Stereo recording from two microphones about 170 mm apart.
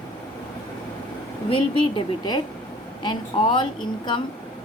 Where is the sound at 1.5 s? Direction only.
30° left (ahead or behind).